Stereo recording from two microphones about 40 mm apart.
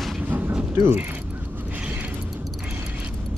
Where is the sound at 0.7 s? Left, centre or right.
Right.